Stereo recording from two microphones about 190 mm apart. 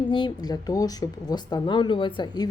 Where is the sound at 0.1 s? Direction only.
25° left (ahead or behind).